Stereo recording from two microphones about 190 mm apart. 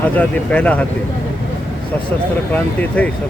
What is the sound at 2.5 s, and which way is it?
Speech, 10° left (ahead or behind).